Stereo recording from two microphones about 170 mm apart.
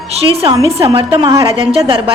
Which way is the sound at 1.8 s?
30° right (ahead or behind).